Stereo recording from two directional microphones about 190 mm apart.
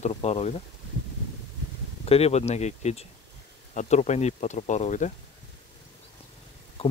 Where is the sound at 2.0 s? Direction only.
35° left (ahead or behind).